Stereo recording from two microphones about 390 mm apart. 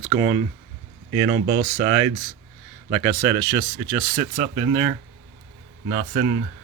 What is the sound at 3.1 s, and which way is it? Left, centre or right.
Speech, right.